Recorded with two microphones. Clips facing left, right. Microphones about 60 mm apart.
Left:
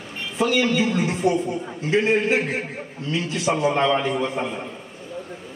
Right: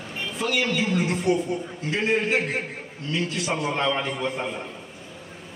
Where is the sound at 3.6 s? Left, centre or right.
Centre.